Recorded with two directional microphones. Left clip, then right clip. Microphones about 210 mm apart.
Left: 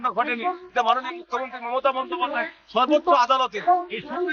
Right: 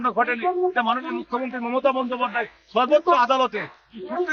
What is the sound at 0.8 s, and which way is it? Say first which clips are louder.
A man's voice: left 1 dB; 20° left (ahead or behind).